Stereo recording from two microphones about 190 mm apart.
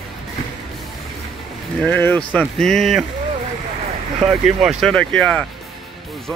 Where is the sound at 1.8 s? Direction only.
10° left (ahead or behind).